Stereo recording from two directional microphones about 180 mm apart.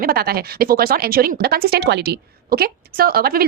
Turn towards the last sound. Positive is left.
turn(degrees=-55)  # may be behind; listen again after turning